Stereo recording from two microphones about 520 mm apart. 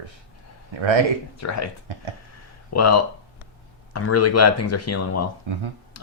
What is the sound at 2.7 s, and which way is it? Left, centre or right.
Speech, left.